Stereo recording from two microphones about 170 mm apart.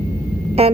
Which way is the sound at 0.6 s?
35° right (ahead or behind).